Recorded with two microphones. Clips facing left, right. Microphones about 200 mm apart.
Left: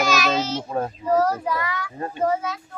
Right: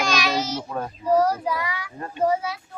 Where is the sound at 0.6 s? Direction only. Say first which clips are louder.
Left 4 dB; 25° left (ahead or behind).